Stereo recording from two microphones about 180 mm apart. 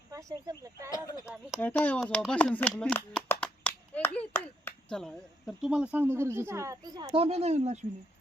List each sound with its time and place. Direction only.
0.1 s speech: 20° right (ahead or behind)
0.9 s speech: 20° left (ahead or behind)
1.2 s speech: 5° right (ahead or behind); by 7.9 s 35° right (ahead or behind)